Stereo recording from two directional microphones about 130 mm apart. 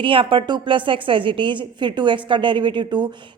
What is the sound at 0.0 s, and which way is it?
A woman's voice, 40° right (ahead or behind).